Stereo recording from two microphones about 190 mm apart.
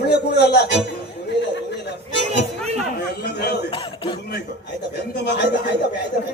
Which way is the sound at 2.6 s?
35° right (ahead or behind).